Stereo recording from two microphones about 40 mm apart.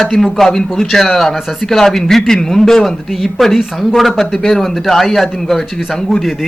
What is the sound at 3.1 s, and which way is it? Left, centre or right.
A man's voice, centre.